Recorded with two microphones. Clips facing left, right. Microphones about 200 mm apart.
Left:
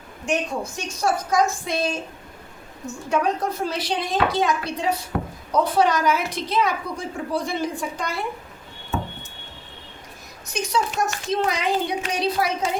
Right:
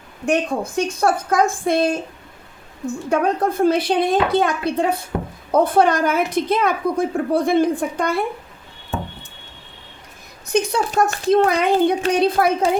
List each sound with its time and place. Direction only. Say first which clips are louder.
0.3 s a woman's voice: right 5 dB; 55° right (ahead or behind)
10.4 s a woman's voice: right 5 dB; 55° right (ahead or behind)